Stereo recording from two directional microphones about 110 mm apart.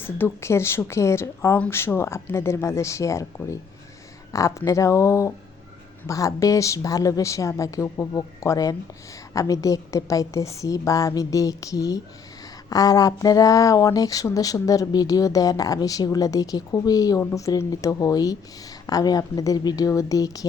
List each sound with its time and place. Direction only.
0.0 s speech: 20° left (ahead or behind)